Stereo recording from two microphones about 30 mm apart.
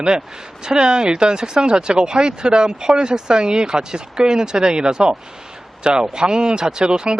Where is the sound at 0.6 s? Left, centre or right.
Right.